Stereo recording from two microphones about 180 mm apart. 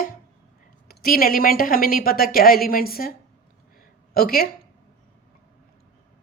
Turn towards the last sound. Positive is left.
turn(degrees=55)  # may be behind; listen again after turning